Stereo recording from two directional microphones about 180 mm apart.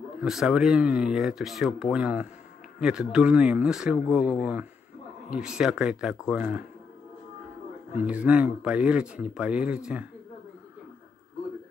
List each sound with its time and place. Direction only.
0.2 s speech: centre (ahead or behind)
8.0 s speech: 5° right (ahead or behind)